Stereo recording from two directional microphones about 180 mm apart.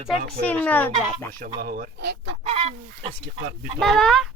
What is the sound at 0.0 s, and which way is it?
Speech, 50° right (ahead or behind).